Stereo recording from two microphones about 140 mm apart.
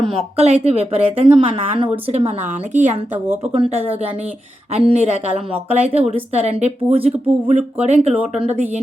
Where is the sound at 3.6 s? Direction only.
45° right (ahead or behind).